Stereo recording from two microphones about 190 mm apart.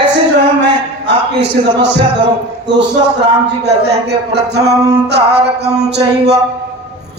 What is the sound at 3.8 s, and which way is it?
Music, 60° right (ahead or behind).